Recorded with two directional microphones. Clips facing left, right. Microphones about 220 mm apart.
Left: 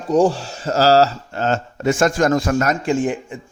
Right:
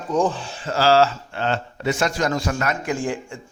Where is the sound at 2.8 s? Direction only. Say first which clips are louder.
Left 5 dB; 25° left (ahead or behind).